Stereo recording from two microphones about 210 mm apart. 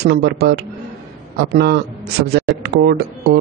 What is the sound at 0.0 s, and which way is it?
Speech, 50° right (ahead or behind).